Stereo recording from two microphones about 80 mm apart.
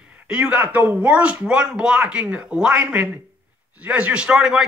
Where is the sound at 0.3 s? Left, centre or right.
Centre.